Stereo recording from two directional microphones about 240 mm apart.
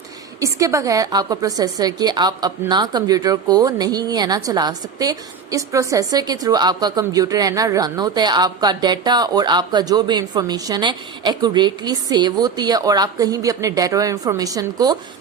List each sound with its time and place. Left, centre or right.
0.3 s a woman's voice: centre